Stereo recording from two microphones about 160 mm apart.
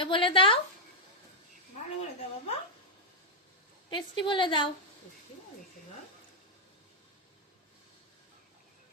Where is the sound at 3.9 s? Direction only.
30° left (ahead or behind).